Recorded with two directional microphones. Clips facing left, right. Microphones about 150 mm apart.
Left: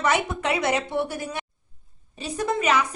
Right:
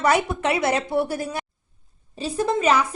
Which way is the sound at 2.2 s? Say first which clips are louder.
Right 3 dB; 30° right (ahead or behind).